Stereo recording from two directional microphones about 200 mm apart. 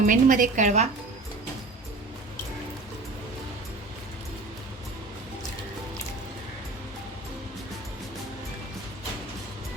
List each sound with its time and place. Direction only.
0.0 s a woman's voice: 40° right (ahead or behind)